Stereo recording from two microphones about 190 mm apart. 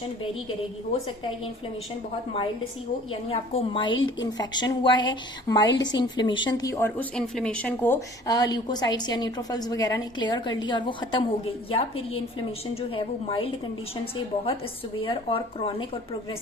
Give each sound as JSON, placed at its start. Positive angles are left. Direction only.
{"t": 3.1, "sound": "a woman's voice", "side_deg": 30}